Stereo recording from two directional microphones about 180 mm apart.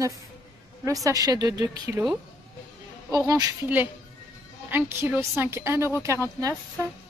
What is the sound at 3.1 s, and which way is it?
Speech, 20° right (ahead or behind).